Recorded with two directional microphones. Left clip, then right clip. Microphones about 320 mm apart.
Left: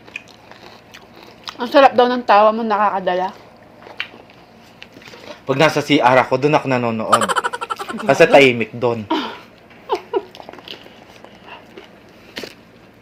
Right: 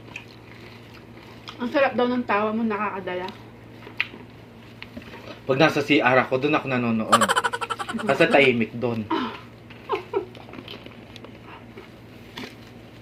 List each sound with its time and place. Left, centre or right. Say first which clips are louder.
1.5 s a woman's voice: left 10 dB; left
5.3 s a woman's voice: left 5 dB; left
7.1 s a sound: left 3 dB; centre
8.0 s a woman's voice: left 8 dB; left